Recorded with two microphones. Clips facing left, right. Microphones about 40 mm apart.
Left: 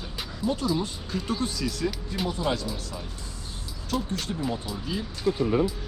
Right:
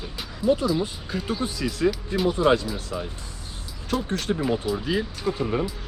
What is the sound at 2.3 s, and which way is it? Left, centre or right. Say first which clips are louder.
Speech: right 9 dB; right.